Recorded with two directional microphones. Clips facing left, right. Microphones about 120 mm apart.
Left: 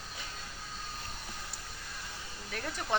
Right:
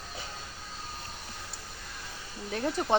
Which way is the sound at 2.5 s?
30° right (ahead or behind).